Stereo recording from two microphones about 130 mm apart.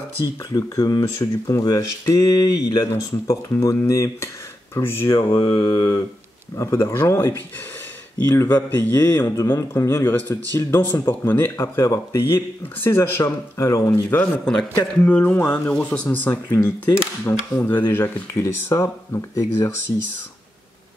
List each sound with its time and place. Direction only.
0.5 s a man's voice: 30° left (ahead or behind)
5.1 s a man's voice: 30° left (ahead or behind)
14.1 s speech: 10° left (ahead or behind)